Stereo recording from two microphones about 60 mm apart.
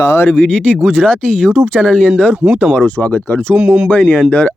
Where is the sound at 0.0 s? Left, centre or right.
Left.